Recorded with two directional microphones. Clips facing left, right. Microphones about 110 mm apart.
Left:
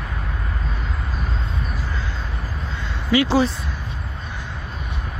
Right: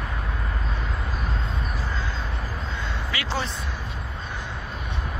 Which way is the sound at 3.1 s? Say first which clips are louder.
Left 15 dB; 15° left (ahead or behind).